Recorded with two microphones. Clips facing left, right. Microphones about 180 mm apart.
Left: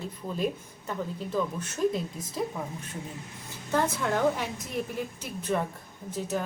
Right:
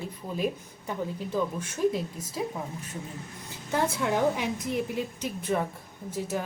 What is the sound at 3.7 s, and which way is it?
A woman's voice, 15° right (ahead or behind).